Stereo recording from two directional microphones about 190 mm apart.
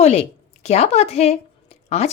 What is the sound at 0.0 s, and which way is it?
A woman's voice, 35° left (ahead or behind).